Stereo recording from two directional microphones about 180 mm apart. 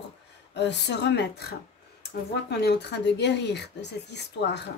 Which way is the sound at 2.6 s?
70° left (ahead or behind).